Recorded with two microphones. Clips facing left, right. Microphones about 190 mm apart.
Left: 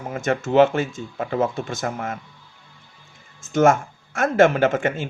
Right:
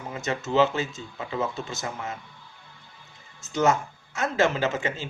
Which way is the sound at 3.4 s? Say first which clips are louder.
Left 6 dB; 50° left (ahead or behind).